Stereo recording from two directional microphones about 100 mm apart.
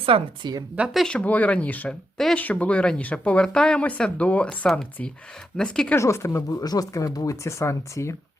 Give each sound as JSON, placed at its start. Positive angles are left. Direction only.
{"t": 0.1, "sound": "speech", "side_deg": -75}
{"t": 0.9, "sound": "speech", "side_deg": 10}
{"t": 2.1, "sound": "speech", "side_deg": 5}
{"t": 2.4, "sound": "speech", "side_deg": 15}
{"t": 5.9, "sound": "speech", "side_deg": 25}